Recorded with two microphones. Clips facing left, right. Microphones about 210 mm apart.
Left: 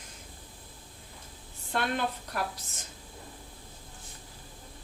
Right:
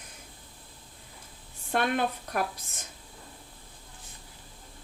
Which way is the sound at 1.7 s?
55° right (ahead or behind).